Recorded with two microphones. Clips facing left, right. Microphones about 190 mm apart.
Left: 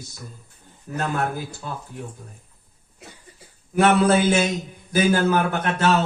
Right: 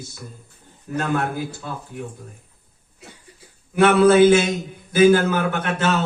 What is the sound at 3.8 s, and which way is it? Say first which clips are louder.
Mantra: right 5 dB; 40° left (ahead or behind).